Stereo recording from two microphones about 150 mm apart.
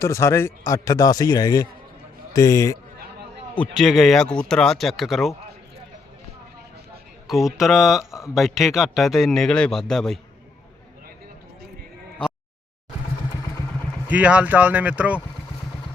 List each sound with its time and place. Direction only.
0.0 s a man's voice: 20° left (ahead or behind)
3.6 s speech: centre (ahead or behind)
7.3 s speech: centre (ahead or behind)
14.1 s speech: 10° right (ahead or behind)